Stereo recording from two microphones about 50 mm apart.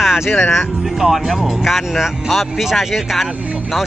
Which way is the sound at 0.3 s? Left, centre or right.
Left.